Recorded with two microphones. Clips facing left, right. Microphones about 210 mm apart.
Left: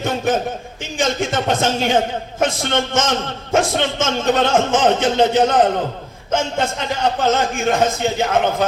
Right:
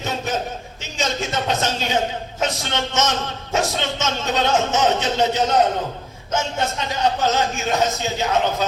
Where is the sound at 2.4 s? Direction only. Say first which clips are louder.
Left 5 dB; 50° left (ahead or behind).